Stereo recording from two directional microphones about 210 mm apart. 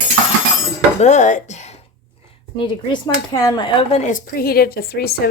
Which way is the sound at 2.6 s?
20° left (ahead or behind).